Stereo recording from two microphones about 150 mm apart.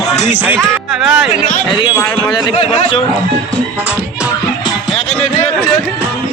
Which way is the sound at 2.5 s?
40° left (ahead or behind).